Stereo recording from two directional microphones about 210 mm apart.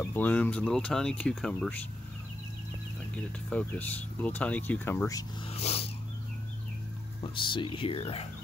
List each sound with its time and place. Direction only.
0.0 s speech: 10° left (ahead or behind)
3.2 s speech: 5° left (ahead or behind)
5.5 s speech: 30° left (ahead or behind)
7.2 s speech: 25° left (ahead or behind)